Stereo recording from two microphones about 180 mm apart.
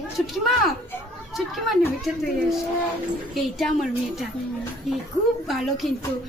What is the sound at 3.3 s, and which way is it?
A woman's voice, centre (ahead or behind).